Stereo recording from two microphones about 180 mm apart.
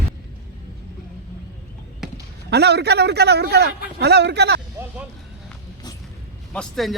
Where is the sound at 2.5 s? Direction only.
65° right (ahead or behind).